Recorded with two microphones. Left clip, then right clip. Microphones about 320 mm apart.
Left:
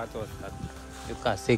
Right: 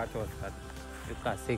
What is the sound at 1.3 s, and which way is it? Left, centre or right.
Speech, left.